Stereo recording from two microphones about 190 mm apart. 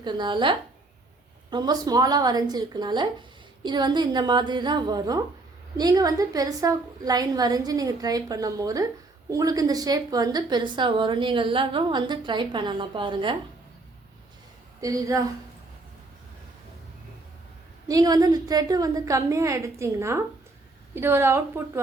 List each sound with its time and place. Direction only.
0.0 s a woman's voice: 25° right (ahead or behind)
14.8 s a woman's voice: 15° right (ahead or behind)
17.8 s a woman's voice: 20° right (ahead or behind)